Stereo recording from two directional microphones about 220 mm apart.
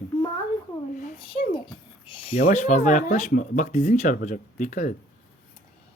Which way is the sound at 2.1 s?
25° left (ahead or behind).